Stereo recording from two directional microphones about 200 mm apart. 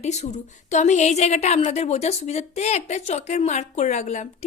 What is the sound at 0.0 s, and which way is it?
A woman's voice, 35° left (ahead or behind).